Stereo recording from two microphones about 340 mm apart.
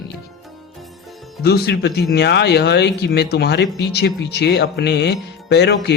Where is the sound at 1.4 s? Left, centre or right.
Left.